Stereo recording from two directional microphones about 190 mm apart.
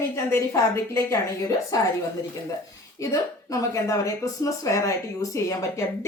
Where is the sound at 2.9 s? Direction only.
15° left (ahead or behind).